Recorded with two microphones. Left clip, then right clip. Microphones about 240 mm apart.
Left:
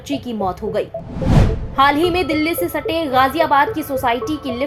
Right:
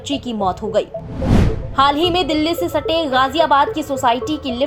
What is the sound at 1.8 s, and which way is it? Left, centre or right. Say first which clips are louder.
A woman's voice: even; right.